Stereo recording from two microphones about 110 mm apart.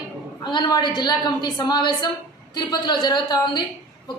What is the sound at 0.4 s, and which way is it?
A woman's voice, 45° left (ahead or behind).